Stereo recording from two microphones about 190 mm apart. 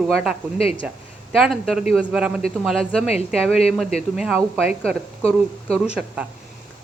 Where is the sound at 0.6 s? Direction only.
30° left (ahead or behind).